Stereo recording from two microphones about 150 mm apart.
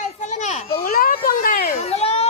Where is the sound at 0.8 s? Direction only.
75° left (ahead or behind).